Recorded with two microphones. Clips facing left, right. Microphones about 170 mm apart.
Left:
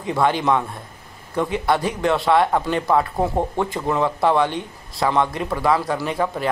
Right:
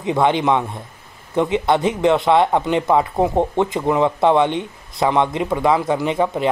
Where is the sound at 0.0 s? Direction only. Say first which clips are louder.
Right 3 dB; 20° right (ahead or behind).